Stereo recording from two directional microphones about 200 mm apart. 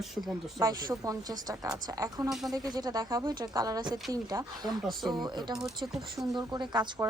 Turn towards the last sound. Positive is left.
turn(degrees=-20)  # may be behind; listen again after turning